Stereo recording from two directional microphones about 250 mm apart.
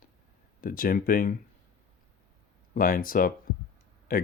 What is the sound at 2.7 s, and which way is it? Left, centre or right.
Speech, left.